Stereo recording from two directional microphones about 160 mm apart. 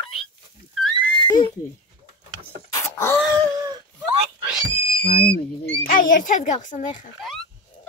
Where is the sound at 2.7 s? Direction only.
15° left (ahead or behind).